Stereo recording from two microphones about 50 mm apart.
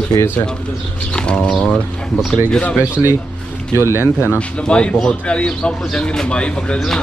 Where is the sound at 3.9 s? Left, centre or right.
Right.